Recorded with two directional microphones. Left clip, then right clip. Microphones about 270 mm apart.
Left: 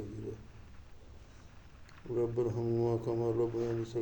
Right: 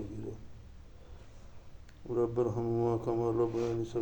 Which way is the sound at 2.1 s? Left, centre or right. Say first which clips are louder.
Right 2 dB; centre.